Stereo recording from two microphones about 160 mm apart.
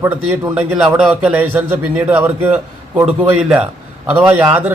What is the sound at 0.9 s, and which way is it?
A man's voice, 10° right (ahead or behind).